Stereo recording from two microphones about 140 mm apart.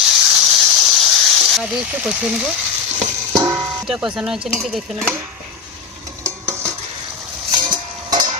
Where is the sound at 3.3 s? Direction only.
25° right (ahead or behind).